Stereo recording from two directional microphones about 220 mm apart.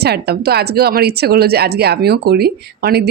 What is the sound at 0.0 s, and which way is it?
A woman's voice, 45° right (ahead or behind).